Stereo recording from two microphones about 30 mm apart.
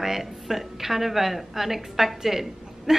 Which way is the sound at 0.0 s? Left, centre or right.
Centre.